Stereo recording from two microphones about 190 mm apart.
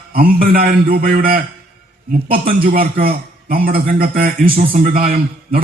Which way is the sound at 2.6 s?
50° right (ahead or behind).